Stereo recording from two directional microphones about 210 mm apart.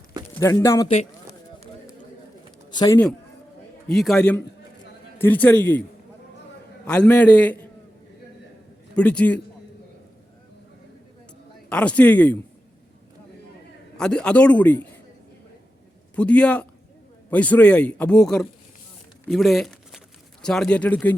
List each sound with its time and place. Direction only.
0.3 s a man's voice: 15° left (ahead or behind)
2.6 s speech: 20° left (ahead or behind)
3.8 s a man's voice: centre (ahead or behind)
6.8 s a man's voice: 5° left (ahead or behind)
9.0 s a man's voice: 5° left (ahead or behind)
11.7 s a man's voice: 5° left (ahead or behind)
13.9 s a man's voice: 5° left (ahead or behind)
16.1 s a man's voice: 5° left (ahead or behind)
19.2 s a sound: centre (ahead or behind)
20.4 s a man's voice: 5° left (ahead or behind)